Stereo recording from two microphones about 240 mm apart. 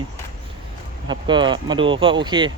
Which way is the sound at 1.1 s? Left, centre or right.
Centre.